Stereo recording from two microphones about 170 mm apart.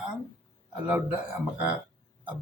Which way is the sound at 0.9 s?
10° right (ahead or behind).